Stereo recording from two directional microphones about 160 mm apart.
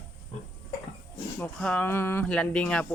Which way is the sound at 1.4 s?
10° left (ahead or behind).